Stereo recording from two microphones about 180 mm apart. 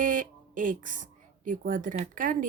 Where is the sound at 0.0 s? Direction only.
50° right (ahead or behind).